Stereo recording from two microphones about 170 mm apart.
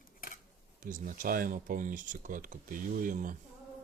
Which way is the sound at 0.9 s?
50° right (ahead or behind).